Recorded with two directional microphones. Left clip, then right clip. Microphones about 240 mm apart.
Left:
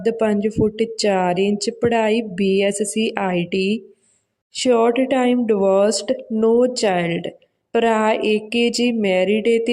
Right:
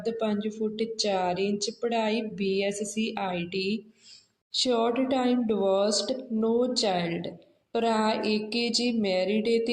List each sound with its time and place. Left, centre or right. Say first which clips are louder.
0.0 s speech: left 11 dB; left
4.6 s speech: left 10 dB; left